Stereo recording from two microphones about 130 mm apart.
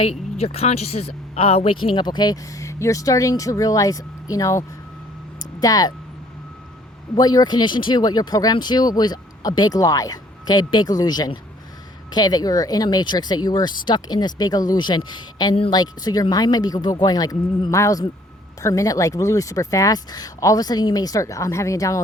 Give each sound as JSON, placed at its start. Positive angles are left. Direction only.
{"t": 0.0, "sound": "speech", "side_deg": 50}
{"t": 5.4, "sound": "a sound", "side_deg": 30}
{"t": 7.2, "sound": "speech", "side_deg": 30}